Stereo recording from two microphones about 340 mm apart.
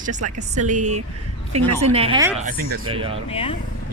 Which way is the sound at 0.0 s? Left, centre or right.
Right.